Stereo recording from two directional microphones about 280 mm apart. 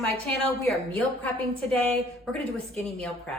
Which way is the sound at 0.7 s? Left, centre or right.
Centre.